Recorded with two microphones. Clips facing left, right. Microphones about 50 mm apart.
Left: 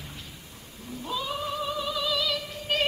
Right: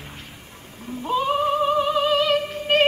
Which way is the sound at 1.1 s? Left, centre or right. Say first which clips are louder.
Right 11 dB; right.